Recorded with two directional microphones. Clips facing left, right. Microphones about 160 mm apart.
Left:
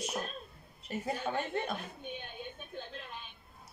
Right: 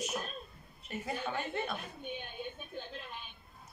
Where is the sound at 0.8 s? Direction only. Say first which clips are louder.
Left 2 dB; 35° left (ahead or behind).